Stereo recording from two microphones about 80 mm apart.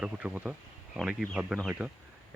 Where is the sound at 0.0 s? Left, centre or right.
Centre.